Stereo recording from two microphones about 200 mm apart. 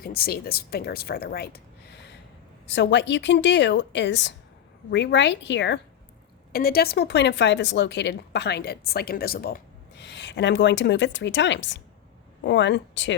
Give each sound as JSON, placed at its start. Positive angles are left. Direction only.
{"t": 0.0, "sound": "speech", "side_deg": 50}
{"t": 6.5, "sound": "speech", "side_deg": 50}